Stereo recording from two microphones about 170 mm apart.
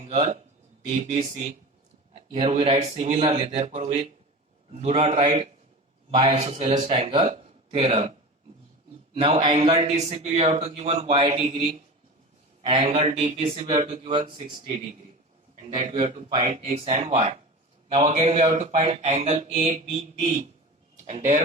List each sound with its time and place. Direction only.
0.0 s speech: 35° right (ahead or behind)
2.1 s speech: 35° right (ahead or behind)
9.1 s a man's voice: 35° right (ahead or behind)